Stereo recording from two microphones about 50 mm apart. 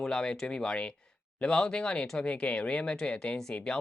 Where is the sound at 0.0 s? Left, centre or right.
Centre.